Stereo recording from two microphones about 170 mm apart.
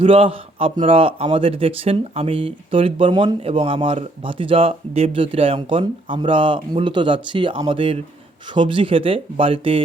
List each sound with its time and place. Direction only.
0.0 s speech: 30° right (ahead or behind)